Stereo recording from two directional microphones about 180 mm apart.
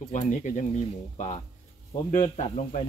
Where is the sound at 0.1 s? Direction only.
40° left (ahead or behind).